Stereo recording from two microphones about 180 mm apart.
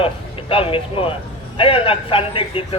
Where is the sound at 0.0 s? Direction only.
30° left (ahead or behind).